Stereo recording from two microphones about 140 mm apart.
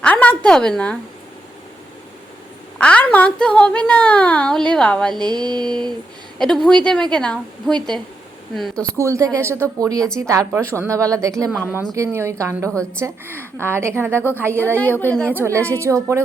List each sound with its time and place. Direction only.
0.0 s a woman's voice: 10° left (ahead or behind)
2.7 s a woman's voice: 10° left (ahead or behind)
5.2 s mantra: 30° right (ahead or behind)
6.4 s a woman's voice: 5° left (ahead or behind)
9.0 s a woman's voice: 20° right (ahead or behind)
14.2 s a woman's voice: 15° left (ahead or behind)
15.3 s a woman's voice: 15° right (ahead or behind)